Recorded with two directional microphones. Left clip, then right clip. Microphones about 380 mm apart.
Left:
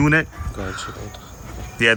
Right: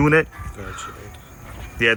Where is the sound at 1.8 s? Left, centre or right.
Centre.